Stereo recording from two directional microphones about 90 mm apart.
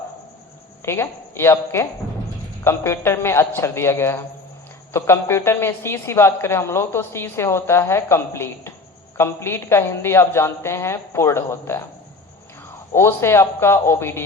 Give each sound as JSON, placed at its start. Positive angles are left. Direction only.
{"t": 0.9, "sound": "a woman's voice", "side_deg": 25}
{"t": 12.9, "sound": "a woman's voice", "side_deg": 30}